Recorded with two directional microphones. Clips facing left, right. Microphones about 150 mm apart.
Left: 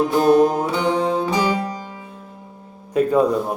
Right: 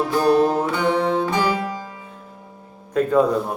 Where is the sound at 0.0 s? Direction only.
20° left (ahead or behind).